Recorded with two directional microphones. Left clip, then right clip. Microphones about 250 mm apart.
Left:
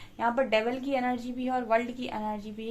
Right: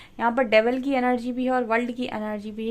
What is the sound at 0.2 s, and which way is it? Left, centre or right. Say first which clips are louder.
A woman's voice: right 6 dB; right.